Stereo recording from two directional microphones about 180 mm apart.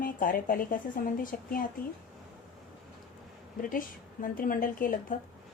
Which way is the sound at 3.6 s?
50° left (ahead or behind).